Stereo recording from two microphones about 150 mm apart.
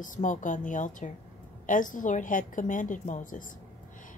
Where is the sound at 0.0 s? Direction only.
60° left (ahead or behind).